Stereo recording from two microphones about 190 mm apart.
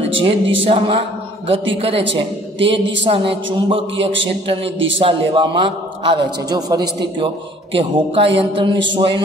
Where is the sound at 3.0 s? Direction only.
25° right (ahead or behind).